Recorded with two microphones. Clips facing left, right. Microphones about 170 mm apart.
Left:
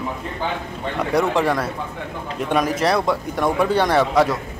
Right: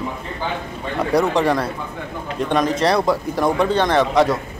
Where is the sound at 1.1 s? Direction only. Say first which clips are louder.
Right 2 dB; centre (ahead or behind).